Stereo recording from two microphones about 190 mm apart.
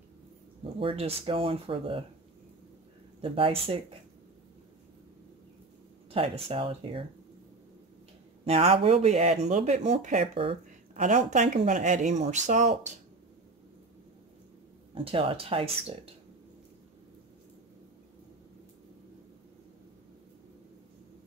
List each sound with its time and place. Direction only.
0.7 s speech: 30° right (ahead or behind)
3.2 s speech: 30° right (ahead or behind)
6.0 s speech: 30° right (ahead or behind)
8.5 s speech: 30° right (ahead or behind)
15.0 s speech: 30° right (ahead or behind)